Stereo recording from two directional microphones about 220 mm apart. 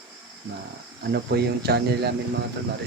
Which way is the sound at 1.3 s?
45° right (ahead or behind).